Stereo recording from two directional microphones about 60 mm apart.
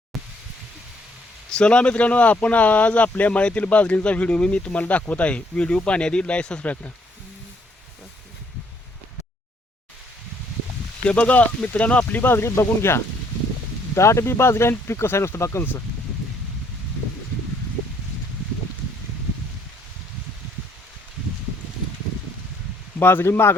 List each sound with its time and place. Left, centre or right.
1.5 s speech: centre
11.0 s speech: left
12.0 s speech: left
23.0 s speech: left